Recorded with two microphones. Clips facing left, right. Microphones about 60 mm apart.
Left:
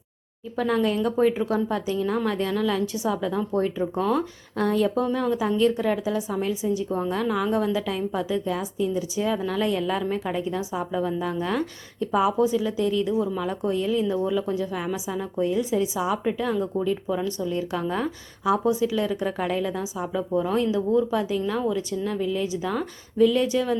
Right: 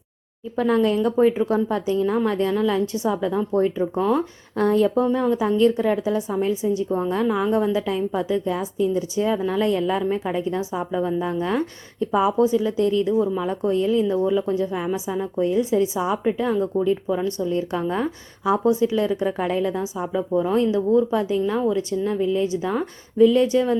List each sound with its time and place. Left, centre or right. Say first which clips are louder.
0.5 s a woman's voice: right 4 dB; right
4.5 s a woman's voice: right 4 dB; right
6.9 s a woman's voice: right 3 dB; right
10.6 s a woman's voice: right 2 dB; right
10.9 s a woman's voice: right 3 dB; centre
12.1 s a woman's voice: right 3 dB; right
14.1 s a woman's voice: right 4 dB; right
17.9 s a woman's voice: right 3 dB; right
20.0 s a woman's voice: right 2 dB; centre